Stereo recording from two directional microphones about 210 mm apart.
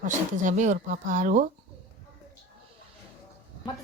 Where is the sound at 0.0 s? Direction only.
35° right (ahead or behind).